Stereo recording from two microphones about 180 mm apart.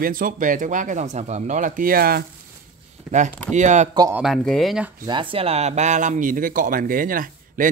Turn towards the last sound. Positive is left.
turn(degrees=-50)  # may be behind; listen again after turning